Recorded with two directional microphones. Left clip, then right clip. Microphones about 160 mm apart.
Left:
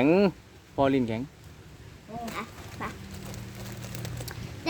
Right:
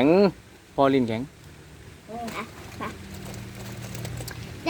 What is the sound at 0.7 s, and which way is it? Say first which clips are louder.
Speech: right 4 dB; 15° left (ahead or behind).